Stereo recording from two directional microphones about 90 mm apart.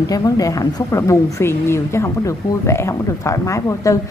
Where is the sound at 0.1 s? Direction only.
40° left (ahead or behind).